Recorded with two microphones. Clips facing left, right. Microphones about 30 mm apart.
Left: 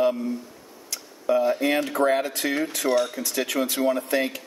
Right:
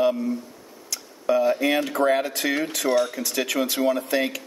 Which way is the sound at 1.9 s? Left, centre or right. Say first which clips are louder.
Right 1 dB; right.